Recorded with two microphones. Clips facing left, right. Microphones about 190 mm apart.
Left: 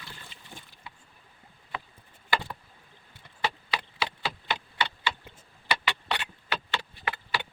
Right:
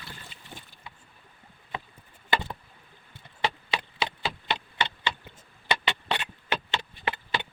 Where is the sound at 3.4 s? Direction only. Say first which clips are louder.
Right 2 dB; 20° right (ahead or behind).